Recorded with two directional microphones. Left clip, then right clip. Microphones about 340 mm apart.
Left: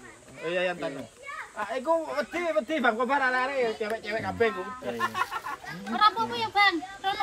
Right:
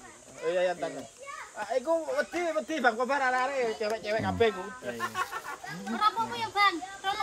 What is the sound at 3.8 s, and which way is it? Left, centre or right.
Speech, centre.